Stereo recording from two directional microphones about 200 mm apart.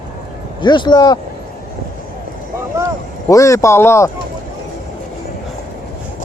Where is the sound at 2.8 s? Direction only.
15° right (ahead or behind).